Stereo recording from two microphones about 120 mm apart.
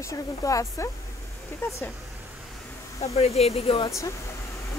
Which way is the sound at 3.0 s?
60° left (ahead or behind).